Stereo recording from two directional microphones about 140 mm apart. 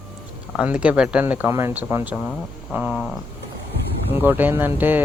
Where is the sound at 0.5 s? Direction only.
5° right (ahead or behind).